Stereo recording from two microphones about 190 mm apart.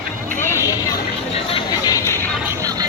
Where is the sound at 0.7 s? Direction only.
20° left (ahead or behind).